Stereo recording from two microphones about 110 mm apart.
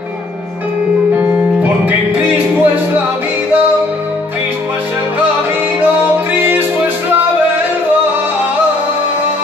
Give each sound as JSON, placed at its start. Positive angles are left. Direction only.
{"t": 1.1, "sound": "music", "side_deg": -15}